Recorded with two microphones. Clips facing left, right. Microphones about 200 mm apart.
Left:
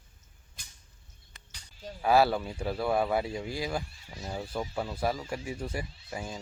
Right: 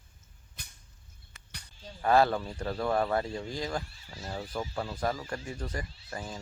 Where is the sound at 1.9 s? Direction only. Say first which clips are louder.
Left 1 dB; 5° left (ahead or behind).